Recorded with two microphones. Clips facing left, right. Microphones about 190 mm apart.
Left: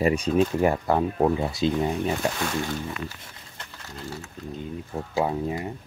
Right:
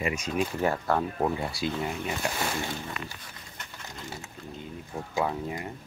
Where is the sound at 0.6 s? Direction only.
15° left (ahead or behind).